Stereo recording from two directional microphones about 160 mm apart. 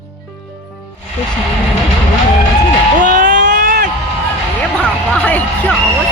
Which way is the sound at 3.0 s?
55° right (ahead or behind).